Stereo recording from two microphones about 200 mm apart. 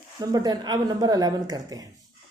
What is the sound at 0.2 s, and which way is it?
A woman's voice, 20° right (ahead or behind).